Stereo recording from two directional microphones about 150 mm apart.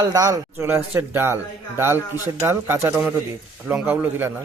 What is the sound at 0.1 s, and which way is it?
Speech, 25° right (ahead or behind).